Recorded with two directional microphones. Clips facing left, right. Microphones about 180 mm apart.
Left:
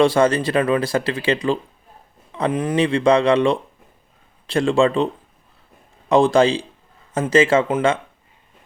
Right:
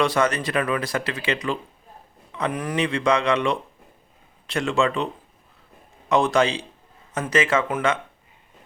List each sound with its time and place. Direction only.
0.0 s speech: 30° left (ahead or behind)
6.1 s speech: 30° left (ahead or behind)